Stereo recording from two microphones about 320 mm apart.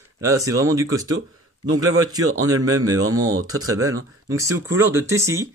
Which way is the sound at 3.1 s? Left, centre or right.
Right.